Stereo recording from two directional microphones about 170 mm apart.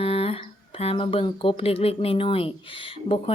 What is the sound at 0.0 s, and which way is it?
Speech, 35° left (ahead or behind).